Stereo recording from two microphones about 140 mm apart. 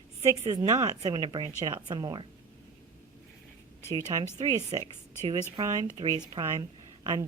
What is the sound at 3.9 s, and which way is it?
Speech, 25° right (ahead or behind).